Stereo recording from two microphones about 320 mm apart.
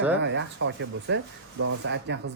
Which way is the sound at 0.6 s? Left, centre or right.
Right.